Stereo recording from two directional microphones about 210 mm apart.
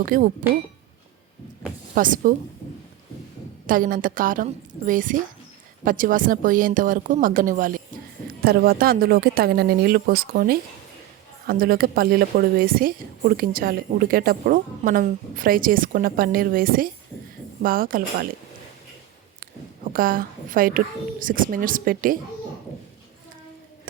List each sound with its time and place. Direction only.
0.0 s a woman's voice: 40° right (ahead or behind)
2.0 s a woman's voice: 40° right (ahead or behind)
3.7 s a woman's voice: 40° right (ahead or behind)
19.4 s a woman's voice: 40° right (ahead or behind)